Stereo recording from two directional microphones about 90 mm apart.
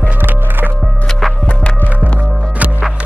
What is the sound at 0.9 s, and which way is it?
Music, 10° left (ahead or behind).